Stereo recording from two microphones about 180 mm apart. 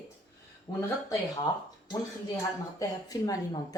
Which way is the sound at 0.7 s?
15° left (ahead or behind).